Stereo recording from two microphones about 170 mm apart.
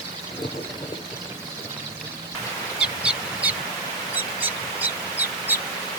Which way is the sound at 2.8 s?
5° right (ahead or behind).